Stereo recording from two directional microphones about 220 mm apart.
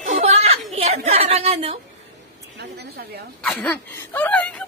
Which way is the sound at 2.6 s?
50° right (ahead or behind).